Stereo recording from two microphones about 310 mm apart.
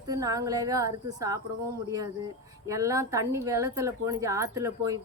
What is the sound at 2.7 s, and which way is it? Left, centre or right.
Speech, centre.